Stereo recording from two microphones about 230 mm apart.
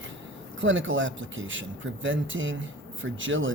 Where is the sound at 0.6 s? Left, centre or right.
Right.